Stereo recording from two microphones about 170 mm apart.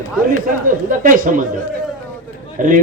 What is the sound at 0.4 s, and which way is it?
Speech, 55° right (ahead or behind).